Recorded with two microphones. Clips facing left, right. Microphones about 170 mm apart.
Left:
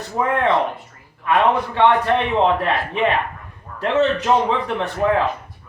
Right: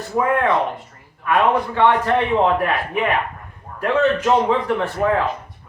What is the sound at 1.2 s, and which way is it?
A man's voice, 20° left (ahead or behind).